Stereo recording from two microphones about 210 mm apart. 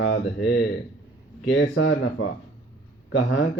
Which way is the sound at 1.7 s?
65° left (ahead or behind).